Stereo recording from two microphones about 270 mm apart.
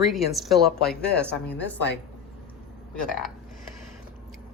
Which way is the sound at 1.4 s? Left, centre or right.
Left.